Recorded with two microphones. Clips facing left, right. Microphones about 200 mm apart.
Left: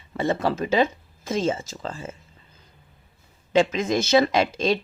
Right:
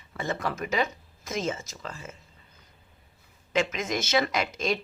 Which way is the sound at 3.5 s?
30° left (ahead or behind).